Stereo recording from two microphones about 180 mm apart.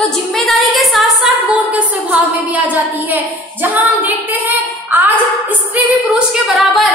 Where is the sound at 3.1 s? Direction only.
10° right (ahead or behind).